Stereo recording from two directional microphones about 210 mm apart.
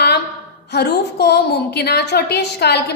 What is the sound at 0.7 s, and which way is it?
A woman's voice, 50° left (ahead or behind).